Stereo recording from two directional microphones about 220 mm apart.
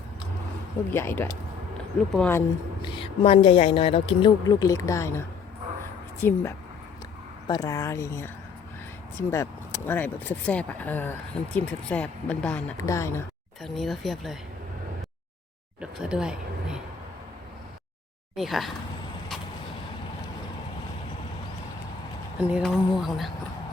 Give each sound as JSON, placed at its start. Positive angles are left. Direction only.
{"t": 0.9, "sound": "speech", "side_deg": 10}
{"t": 2.8, "sound": "speech", "side_deg": 20}
{"t": 9.3, "sound": "speech", "side_deg": 10}
{"t": 13.6, "sound": "speech", "side_deg": 0}
{"t": 15.8, "sound": "speech", "side_deg": -5}
{"t": 18.3, "sound": "speech", "side_deg": 0}
{"t": 22.4, "sound": "speech", "side_deg": -5}